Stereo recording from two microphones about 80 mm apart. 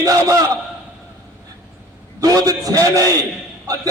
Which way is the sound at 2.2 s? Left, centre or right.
Right.